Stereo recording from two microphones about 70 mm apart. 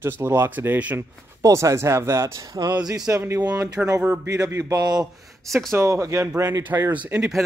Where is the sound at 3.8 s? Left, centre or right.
Centre.